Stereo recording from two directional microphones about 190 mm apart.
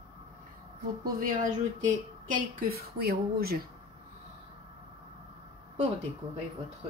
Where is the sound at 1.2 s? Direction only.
45° right (ahead or behind).